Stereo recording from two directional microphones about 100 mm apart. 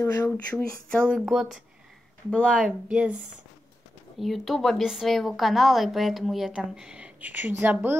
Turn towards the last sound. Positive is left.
turn(degrees=-20)  # may be behind; listen again after turning